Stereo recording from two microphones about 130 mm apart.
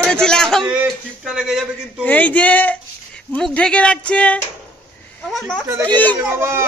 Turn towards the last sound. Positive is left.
turn(degrees=-20)  # may be behind; listen again after turning